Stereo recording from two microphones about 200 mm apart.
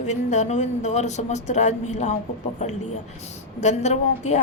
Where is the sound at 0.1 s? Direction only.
35° left (ahead or behind).